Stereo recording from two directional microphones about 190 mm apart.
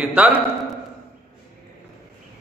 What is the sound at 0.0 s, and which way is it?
Speech, 5° right (ahead or behind).